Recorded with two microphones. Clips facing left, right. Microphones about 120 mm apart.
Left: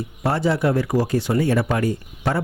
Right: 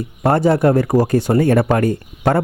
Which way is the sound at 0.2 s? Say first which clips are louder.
Right 7 dB; 50° right (ahead or behind).